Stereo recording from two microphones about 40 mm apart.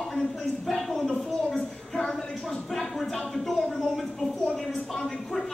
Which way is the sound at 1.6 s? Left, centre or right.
Centre.